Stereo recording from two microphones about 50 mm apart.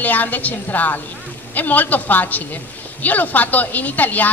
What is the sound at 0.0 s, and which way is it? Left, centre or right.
A woman's voice, left.